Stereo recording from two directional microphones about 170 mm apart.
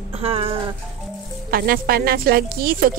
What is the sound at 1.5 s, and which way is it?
A woman's voice, 60° right (ahead or behind).